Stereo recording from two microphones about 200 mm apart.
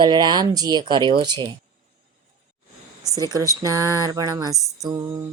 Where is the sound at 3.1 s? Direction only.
20° right (ahead or behind).